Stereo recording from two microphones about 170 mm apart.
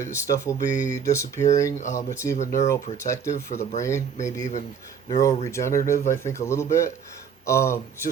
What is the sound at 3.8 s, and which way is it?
Speech, 15° left (ahead or behind).